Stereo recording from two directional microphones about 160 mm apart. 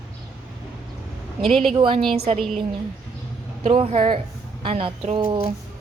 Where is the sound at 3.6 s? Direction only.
40° right (ahead or behind).